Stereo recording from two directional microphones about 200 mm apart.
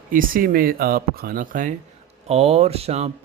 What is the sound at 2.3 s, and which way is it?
Speech, 30° right (ahead or behind).